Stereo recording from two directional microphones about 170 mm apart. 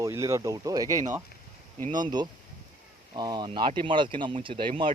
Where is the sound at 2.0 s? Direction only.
25° right (ahead or behind).